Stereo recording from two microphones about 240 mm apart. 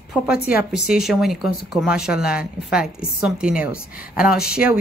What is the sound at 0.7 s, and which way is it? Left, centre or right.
A woman's voice, centre.